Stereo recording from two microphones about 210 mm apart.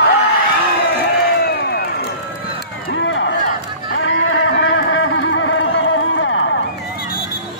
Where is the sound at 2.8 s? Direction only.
60° left (ahead or behind).